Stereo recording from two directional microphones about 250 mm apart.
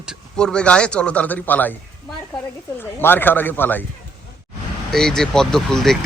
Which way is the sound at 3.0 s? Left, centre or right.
Centre.